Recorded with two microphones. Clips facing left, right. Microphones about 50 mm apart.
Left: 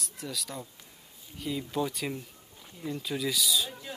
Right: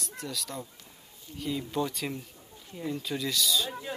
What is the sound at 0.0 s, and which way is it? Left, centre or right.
Speech, centre.